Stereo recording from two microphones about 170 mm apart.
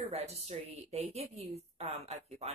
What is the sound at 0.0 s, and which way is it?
A woman's voice, 35° right (ahead or behind).